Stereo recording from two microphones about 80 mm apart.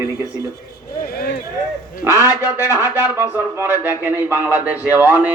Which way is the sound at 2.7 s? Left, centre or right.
Right.